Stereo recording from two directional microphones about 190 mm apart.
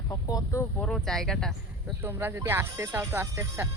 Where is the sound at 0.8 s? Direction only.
5° left (ahead or behind).